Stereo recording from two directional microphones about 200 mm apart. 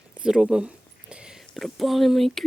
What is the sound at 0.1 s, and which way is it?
Speech, 5° right (ahead or behind).